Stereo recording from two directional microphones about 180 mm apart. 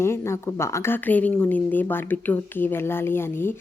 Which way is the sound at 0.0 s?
15° left (ahead or behind).